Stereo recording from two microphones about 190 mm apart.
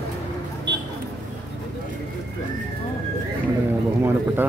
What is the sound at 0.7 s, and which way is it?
Vehicle, 65° right (ahead or behind).